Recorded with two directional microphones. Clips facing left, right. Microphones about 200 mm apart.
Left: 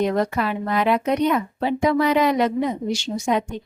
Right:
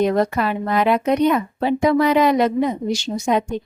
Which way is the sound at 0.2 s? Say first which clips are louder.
Right 3 dB; 40° right (ahead or behind).